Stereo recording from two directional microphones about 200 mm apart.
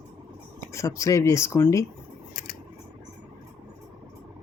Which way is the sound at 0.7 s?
15° left (ahead or behind).